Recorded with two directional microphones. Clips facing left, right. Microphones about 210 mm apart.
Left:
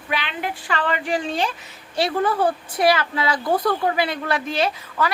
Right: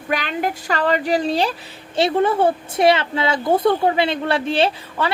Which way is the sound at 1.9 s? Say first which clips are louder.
Right 4 dB; 25° right (ahead or behind).